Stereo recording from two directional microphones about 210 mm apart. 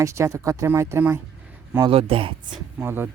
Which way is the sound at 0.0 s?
15° right (ahead or behind).